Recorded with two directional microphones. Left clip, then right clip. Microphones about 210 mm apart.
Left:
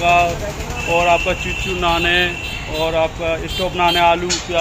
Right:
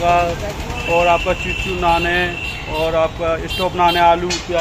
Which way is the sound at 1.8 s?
Centre (ahead or behind).